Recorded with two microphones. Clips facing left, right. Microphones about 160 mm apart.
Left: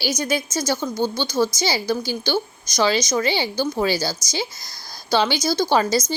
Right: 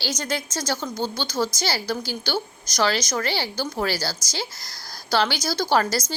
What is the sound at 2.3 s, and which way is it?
Speech, 15° left (ahead or behind).